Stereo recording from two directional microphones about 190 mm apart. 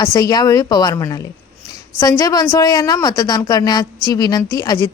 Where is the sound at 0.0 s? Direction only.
20° left (ahead or behind).